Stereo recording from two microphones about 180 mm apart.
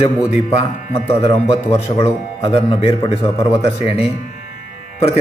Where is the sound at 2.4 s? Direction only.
30° left (ahead or behind).